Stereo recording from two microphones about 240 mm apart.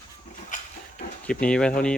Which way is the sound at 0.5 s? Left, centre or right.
Left.